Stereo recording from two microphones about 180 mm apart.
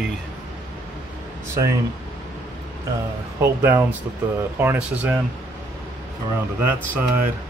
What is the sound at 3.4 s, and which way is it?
Speech, 10° right (ahead or behind).